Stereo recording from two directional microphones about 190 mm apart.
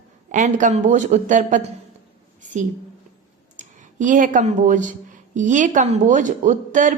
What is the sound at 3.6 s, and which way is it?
Speech, 45° right (ahead or behind).